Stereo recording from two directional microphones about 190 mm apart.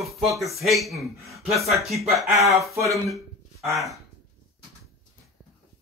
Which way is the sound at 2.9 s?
Centre (ahead or behind).